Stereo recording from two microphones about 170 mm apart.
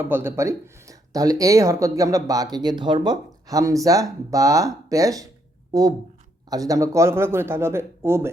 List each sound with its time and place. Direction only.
0.0 s speech: 15° right (ahead or behind)
6.5 s a man's voice: 20° right (ahead or behind)